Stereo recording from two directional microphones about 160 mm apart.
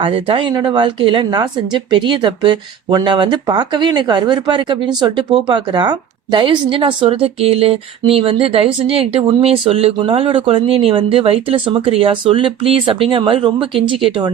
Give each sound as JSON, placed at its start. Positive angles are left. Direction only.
{"t": 0.0, "sound": "speech", "side_deg": -30}